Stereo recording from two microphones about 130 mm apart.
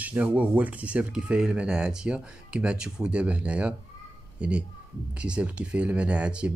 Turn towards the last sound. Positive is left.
turn(degrees=-10)  # may be behind; listen again after turning